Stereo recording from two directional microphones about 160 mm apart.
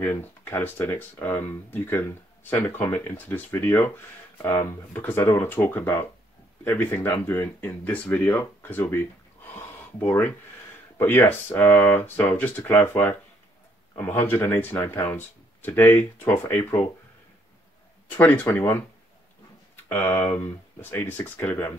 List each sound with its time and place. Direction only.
0.0 s speech: 15° left (ahead or behind)
18.1 s speech: 10° left (ahead or behind)
19.9 s speech: 15° left (ahead or behind)